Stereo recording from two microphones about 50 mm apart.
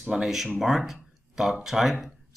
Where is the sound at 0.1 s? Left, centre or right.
Centre.